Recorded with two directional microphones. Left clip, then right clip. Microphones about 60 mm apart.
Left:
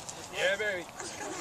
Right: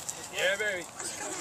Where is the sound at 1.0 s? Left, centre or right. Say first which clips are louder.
Right 1 dB; centre.